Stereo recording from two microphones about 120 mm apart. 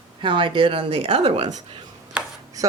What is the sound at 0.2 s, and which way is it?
Speech, 45° right (ahead or behind).